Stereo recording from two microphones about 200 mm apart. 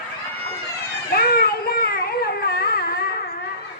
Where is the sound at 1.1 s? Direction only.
50° left (ahead or behind).